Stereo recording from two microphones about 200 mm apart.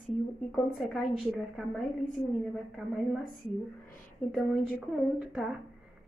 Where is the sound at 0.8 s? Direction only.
Centre (ahead or behind).